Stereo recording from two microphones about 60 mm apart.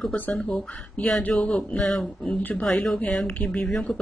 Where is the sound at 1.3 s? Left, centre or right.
Centre.